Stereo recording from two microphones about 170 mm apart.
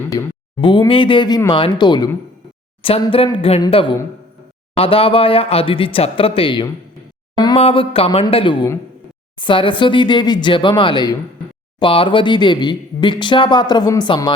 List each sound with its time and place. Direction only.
0.6 s speech: 30° left (ahead or behind)
7.3 s a sound: 25° left (ahead or behind)
7.6 s speech: 35° left (ahead or behind)